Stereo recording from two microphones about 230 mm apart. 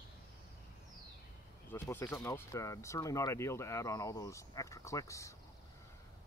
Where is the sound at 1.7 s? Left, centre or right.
Centre.